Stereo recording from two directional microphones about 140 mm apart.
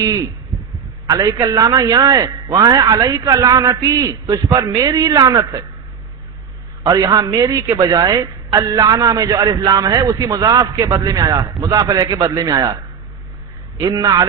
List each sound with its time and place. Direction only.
1.0 s a man's voice: 25° right (ahead or behind)
6.8 s a man's voice: 25° right (ahead or behind)
13.7 s a man's voice: 25° right (ahead or behind)